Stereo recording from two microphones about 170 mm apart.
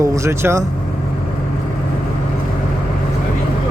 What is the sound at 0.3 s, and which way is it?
Speech, 15° right (ahead or behind).